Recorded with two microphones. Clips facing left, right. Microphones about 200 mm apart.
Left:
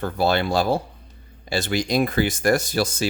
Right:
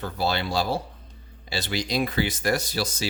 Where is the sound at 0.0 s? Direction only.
50° left (ahead or behind).